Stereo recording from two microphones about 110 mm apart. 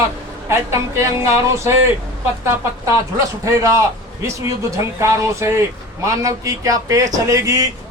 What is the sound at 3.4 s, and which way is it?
Speech, 30° right (ahead or behind).